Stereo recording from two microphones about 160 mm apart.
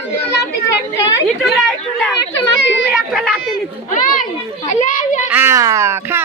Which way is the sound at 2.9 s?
Centre (ahead or behind).